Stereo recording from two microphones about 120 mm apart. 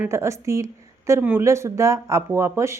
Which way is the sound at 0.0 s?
25° right (ahead or behind).